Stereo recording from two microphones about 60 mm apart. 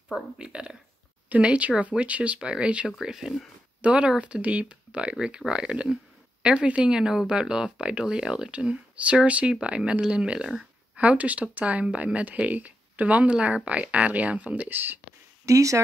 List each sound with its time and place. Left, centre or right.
0.4 s speech: centre
3.0 s speech: centre
3.8 s speech: centre
15.4 s speech: right